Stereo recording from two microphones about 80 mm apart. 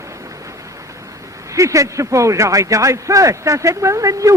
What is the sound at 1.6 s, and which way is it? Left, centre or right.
Speech, right.